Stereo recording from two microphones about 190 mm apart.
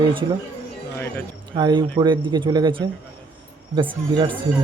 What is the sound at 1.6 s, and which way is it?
A man's voice, 20° right (ahead or behind).